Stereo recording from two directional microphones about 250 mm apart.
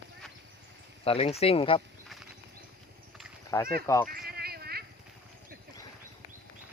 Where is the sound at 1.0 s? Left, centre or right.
Left.